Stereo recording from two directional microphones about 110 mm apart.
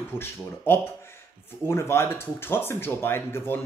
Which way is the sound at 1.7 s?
25° left (ahead or behind).